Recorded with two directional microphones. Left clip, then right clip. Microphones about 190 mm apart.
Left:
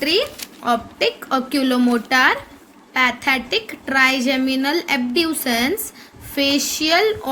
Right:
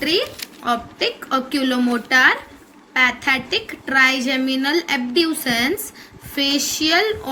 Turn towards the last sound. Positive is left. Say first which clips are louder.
# left 1 dB
turn(degrees=45)  # may be behind; listen again after turning